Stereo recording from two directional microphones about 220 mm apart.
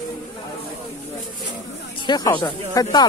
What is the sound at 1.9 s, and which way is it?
Speech, 20° left (ahead or behind).